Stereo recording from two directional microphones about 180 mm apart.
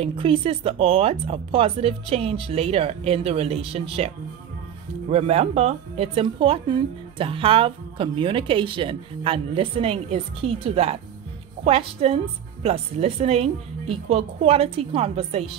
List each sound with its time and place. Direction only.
0.0 s speech: 30° right (ahead or behind)
5.1 s speech: 35° right (ahead or behind)